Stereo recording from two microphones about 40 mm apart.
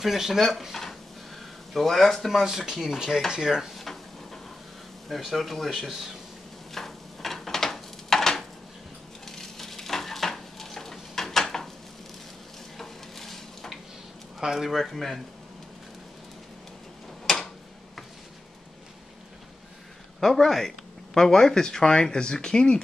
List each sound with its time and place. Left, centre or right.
0.0 s speech: centre
2.4 s speech: centre
3.7 s drawer open or close: centre
5.1 s speech: centre
6.7 s a sound: centre
9.2 s stir: centre
12.7 s stir: centre
14.4 s speech: centre
20.2 s speech: centre